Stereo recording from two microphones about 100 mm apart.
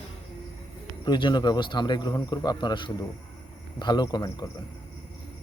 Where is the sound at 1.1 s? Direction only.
50° left (ahead or behind).